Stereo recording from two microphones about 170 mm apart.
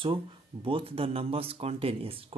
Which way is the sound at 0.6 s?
35° right (ahead or behind).